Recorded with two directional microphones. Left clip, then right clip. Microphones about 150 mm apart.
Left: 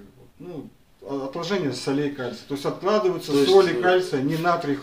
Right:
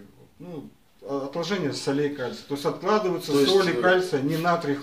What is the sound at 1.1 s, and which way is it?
Speech, 25° left (ahead or behind).